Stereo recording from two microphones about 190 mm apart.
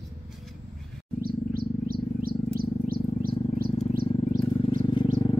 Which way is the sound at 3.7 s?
30° left (ahead or behind).